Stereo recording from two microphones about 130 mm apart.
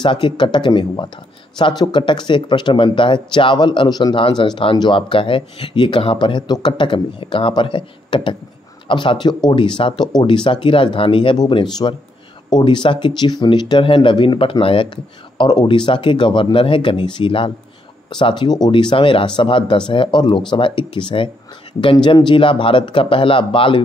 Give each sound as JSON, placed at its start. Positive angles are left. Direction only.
{"t": 0.0, "sound": "speech", "side_deg": 35}